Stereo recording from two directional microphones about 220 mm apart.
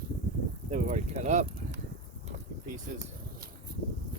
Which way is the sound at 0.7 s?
35° right (ahead or behind).